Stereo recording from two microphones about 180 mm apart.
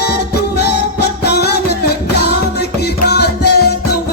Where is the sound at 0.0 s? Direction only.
65° left (ahead or behind).